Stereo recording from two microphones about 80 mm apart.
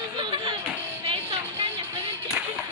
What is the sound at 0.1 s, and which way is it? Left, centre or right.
Music, right.